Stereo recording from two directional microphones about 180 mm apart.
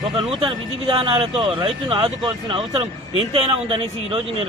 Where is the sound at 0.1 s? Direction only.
25° right (ahead or behind).